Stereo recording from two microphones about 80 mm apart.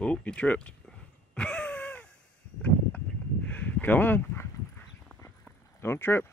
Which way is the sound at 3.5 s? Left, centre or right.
Centre.